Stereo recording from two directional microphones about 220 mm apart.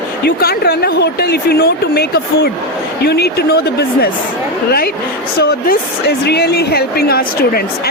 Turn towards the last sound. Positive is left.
turn(degrees=45)  # may be behind; listen again after turning